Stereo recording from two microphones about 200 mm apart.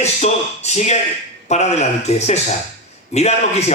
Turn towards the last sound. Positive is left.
turn(degrees=35)  # may be behind; listen again after turning